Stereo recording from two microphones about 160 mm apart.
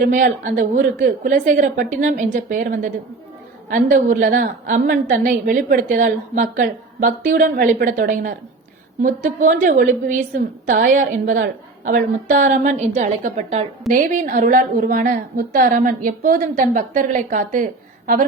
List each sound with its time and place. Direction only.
0.0 s a woman's voice: 55° right (ahead or behind)